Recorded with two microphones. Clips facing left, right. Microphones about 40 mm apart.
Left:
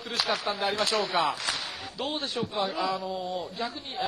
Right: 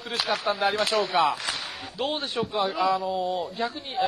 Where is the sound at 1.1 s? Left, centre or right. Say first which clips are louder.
Right 4 dB; centre.